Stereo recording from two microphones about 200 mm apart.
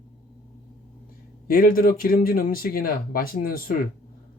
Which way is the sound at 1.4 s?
45° left (ahead or behind).